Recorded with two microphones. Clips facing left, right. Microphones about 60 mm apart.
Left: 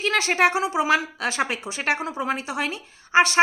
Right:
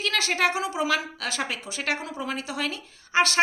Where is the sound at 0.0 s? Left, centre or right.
Left.